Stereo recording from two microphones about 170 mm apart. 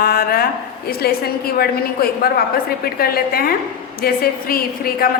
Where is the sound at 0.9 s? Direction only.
65° left (ahead or behind).